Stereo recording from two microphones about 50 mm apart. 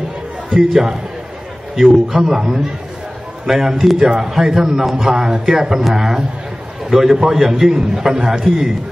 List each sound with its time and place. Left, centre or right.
0.5 s a man's voice: centre